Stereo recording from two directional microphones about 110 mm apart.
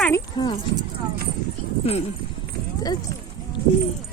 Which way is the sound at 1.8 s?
65° left (ahead or behind).